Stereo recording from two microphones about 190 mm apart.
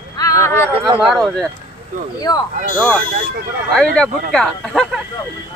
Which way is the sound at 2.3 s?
15° left (ahead or behind).